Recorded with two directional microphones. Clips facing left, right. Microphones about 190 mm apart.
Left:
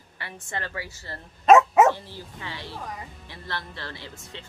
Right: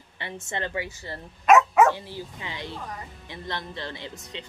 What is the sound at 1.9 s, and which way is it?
Speech, 15° right (ahead or behind).